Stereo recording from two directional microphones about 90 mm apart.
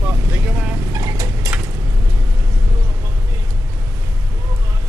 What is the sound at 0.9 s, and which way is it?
Vehicle, 40° right (ahead or behind).